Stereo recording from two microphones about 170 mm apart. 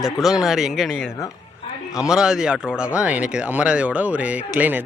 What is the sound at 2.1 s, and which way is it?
Speech, 5° right (ahead or behind).